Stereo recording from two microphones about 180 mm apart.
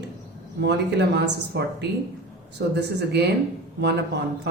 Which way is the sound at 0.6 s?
70° right (ahead or behind).